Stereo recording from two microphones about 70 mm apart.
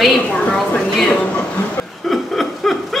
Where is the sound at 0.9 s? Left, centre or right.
Centre.